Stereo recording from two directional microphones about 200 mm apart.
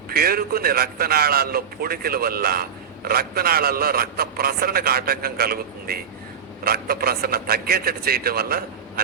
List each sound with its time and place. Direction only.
0.1 s a man's voice: 50° right (ahead or behind)